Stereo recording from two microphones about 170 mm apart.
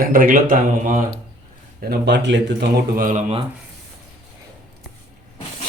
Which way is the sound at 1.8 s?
80° right.